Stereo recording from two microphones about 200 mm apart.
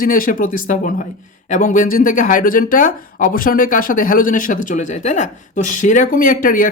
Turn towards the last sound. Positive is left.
turn(degrees=45)  # may be behind; listen again after turning